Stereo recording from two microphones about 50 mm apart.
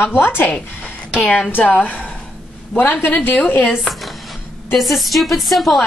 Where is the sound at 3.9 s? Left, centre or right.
Centre.